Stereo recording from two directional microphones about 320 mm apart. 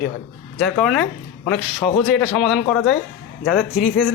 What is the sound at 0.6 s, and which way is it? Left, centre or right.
Speech, centre.